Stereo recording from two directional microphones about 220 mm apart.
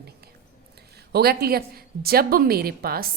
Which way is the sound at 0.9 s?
45° right (ahead or behind).